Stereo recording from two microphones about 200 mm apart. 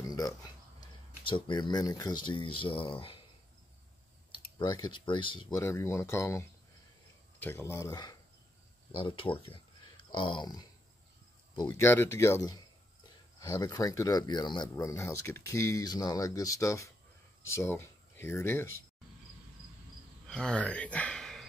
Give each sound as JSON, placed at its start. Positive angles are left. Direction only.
{"t": 0.1, "sound": "a sound", "side_deg": 20}
{"t": 2.2, "sound": "speech", "side_deg": 25}
{"t": 4.6, "sound": "speech", "side_deg": 20}
{"t": 5.5, "sound": "speech", "side_deg": 15}
{"t": 20.2, "sound": "speech", "side_deg": 5}